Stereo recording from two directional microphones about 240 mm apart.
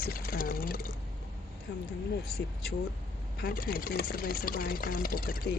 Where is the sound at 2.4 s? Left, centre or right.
Left.